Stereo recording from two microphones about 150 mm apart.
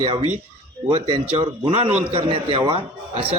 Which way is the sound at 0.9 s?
35° right (ahead or behind).